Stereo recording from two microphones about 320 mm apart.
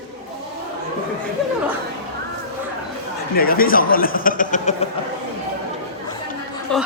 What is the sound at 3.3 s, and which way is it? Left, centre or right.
Speech, left.